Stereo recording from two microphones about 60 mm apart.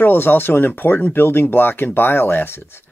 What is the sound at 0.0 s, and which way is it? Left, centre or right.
Speech, left.